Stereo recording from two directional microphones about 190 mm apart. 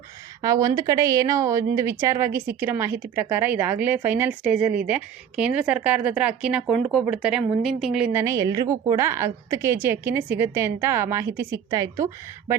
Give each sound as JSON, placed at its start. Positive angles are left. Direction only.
{"t": 0.4, "sound": "a woman's voice", "side_deg": -20}